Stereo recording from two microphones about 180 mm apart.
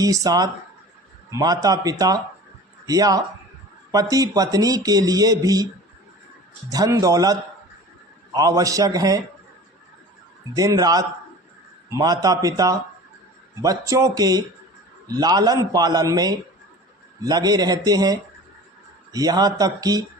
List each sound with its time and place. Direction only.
0.0 s speech: 20° right (ahead or behind)
6.7 s speech: 20° right (ahead or behind)
10.5 s speech: 20° right (ahead or behind)